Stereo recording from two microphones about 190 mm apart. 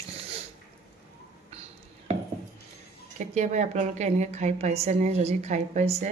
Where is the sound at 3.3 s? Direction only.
40° right (ahead or behind).